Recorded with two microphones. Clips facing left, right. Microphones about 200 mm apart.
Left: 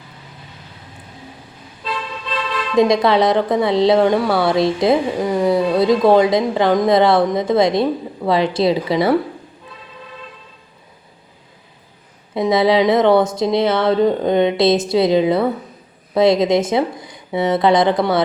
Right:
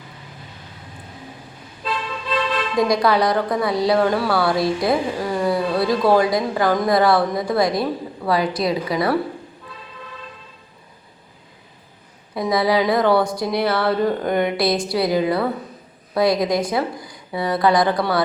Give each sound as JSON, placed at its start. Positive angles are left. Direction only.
{"t": 2.7, "sound": "a woman's voice", "side_deg": 25}
{"t": 12.3, "sound": "a woman's voice", "side_deg": 25}